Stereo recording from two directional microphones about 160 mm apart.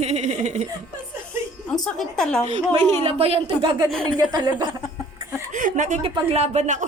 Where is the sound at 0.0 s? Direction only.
45° right (ahead or behind).